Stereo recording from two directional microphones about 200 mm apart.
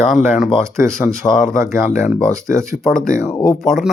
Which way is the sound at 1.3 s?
40° left (ahead or behind).